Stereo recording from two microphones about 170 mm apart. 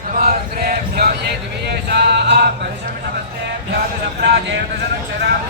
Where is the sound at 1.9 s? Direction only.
80° right.